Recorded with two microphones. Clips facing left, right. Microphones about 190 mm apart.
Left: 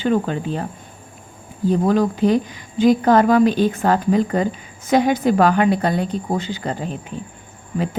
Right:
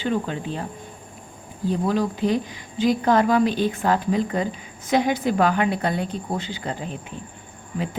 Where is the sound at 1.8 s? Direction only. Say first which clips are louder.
Left 5 dB; 45° left (ahead or behind).